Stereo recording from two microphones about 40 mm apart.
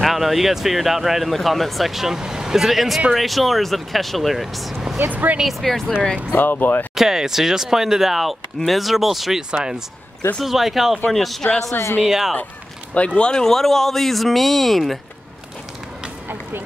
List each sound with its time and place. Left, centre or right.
0.0 s speech: centre
1.3 s speech: centre
4.9 s speech: right
5.4 s speech: centre
6.3 s speech: left
7.0 s speech: centre
12.1 s speech: centre
12.9 s speech: left
13.3 s speech: centre